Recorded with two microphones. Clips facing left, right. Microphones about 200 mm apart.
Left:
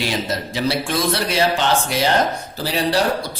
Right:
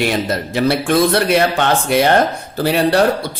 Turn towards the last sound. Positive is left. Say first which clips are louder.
# right 5 dB
turn(degrees=-60)  # may be behind; listen again after turning